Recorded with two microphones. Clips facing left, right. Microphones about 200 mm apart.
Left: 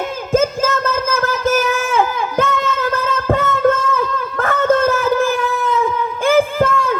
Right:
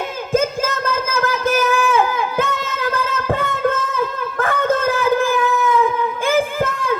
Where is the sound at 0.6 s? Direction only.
50° left (ahead or behind).